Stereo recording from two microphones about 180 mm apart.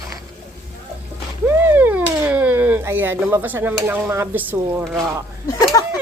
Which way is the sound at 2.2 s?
10° right (ahead or behind).